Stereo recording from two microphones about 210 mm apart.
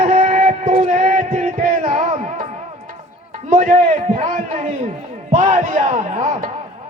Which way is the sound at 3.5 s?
40° right (ahead or behind).